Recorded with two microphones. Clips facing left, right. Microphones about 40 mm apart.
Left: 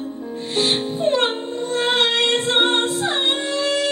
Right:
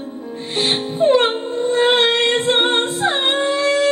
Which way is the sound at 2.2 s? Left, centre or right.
Right.